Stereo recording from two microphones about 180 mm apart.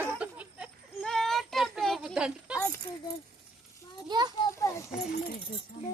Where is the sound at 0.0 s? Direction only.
5° right (ahead or behind).